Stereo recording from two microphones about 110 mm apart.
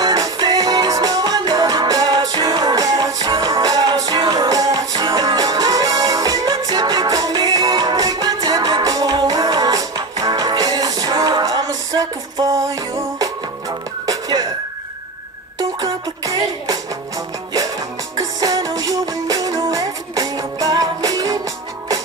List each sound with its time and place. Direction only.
0.0 s music: 35° right (ahead or behind)
14.0 s music: 40° right (ahead or behind)
15.8 s music: 35° right (ahead or behind)
18.1 s music: 35° right (ahead or behind)